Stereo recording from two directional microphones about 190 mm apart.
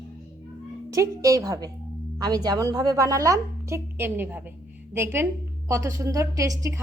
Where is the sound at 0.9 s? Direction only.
15° right (ahead or behind).